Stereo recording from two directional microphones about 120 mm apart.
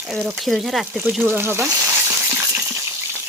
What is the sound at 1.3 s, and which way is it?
Speech, 20° right (ahead or behind).